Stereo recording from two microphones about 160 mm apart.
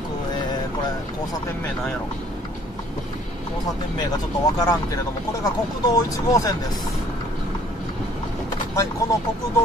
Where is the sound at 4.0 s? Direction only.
25° left (ahead or behind).